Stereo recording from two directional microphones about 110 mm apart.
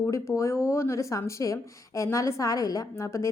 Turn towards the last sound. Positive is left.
turn(degrees=25)  # may be behind; listen again after turning